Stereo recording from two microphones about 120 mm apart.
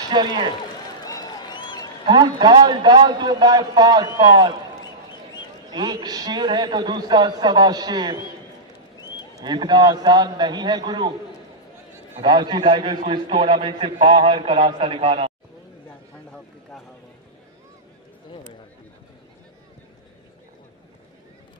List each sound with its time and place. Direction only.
0.1 s a man's voice: 40° right (ahead or behind)
1.0 s a sound: 30° left (ahead or behind)
2.0 s a man's voice: 40° right (ahead or behind)
5.7 s a man's voice: 35° right (ahead or behind)
9.4 s a man's voice: 35° right (ahead or behind)
12.2 s a man's voice: 40° right (ahead or behind)